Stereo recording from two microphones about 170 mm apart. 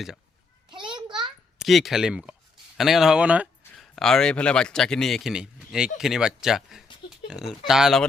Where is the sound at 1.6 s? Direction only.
Centre (ahead or behind).